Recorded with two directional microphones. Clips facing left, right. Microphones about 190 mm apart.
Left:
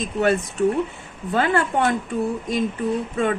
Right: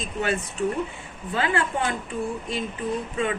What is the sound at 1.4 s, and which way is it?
Speech, 50° left (ahead or behind).